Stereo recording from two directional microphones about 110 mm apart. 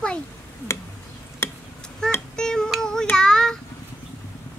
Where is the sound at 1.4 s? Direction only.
25° left (ahead or behind).